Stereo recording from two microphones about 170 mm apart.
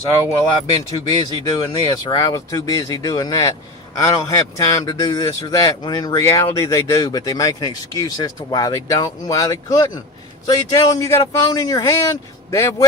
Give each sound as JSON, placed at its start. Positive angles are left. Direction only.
{"t": 0.3, "sound": "a man's voice", "side_deg": 20}